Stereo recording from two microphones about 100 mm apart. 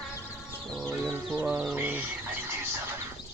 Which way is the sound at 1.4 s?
15° right (ahead or behind).